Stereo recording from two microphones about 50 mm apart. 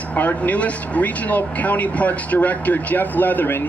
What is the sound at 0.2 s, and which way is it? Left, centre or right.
Speech, left.